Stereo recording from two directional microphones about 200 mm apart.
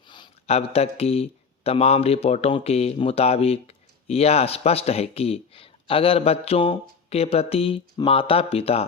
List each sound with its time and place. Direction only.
0.1 s speech: 25° left (ahead or behind)